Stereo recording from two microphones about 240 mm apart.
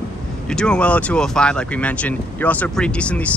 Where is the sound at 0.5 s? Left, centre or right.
Centre.